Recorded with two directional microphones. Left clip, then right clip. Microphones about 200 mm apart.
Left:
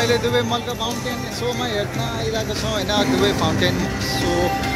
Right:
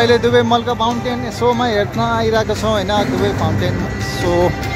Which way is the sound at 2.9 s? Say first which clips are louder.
Right 2 dB; 10° right (ahead or behind).